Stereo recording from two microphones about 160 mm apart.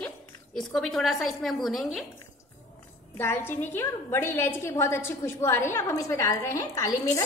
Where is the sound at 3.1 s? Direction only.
15° left (ahead or behind).